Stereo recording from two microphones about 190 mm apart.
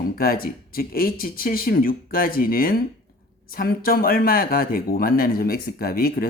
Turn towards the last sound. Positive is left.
turn(degrees=50)  # may be behind; listen again after turning